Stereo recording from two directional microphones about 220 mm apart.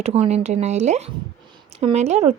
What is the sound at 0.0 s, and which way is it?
A woman's voice, 30° right (ahead or behind).